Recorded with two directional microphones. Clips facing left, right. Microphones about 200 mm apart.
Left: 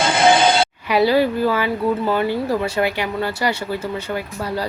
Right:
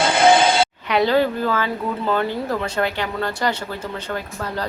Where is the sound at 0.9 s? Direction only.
10° left (ahead or behind).